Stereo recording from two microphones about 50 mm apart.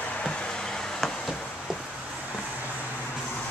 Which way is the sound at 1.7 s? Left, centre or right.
Centre.